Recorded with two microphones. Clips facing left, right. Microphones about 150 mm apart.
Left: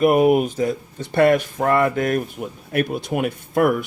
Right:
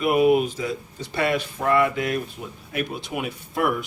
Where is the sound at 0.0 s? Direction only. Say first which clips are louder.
Left 3 dB; 45° left (ahead or behind).